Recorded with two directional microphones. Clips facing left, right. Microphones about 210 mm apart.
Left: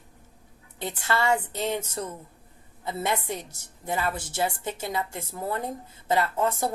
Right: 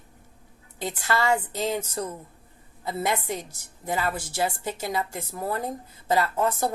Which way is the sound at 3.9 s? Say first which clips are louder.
Right 1 dB; 25° left (ahead or behind).